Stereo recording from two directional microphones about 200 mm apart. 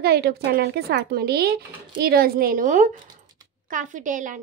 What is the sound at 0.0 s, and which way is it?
A woman's voice, 50° right (ahead or behind).